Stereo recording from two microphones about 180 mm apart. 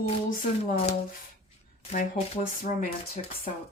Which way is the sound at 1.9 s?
45° left (ahead or behind).